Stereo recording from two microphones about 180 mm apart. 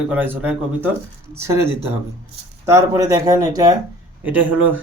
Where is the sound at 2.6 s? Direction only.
15° right (ahead or behind).